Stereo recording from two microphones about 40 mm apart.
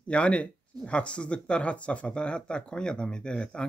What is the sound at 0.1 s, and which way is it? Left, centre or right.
Speech, left.